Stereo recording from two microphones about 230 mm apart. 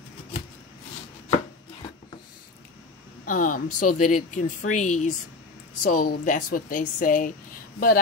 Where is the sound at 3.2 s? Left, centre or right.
Left.